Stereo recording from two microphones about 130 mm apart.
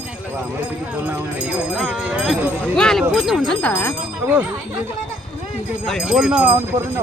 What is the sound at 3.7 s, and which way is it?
Speech, 15° left (ahead or behind).